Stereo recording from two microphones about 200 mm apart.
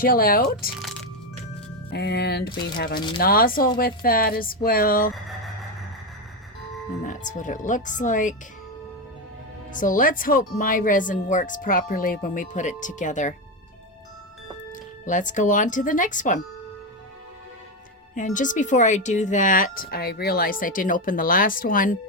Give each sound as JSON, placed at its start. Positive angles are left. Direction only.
{"t": 0.0, "sound": "speech", "side_deg": 45}
{"t": 0.8, "sound": "music", "side_deg": 0}
{"t": 1.9, "sound": "speech", "side_deg": 55}
{"t": 7.0, "sound": "speech", "side_deg": 40}
{"t": 9.7, "sound": "speech", "side_deg": 40}
{"t": 14.7, "sound": "speech", "side_deg": 40}
{"t": 18.3, "sound": "speech", "side_deg": 40}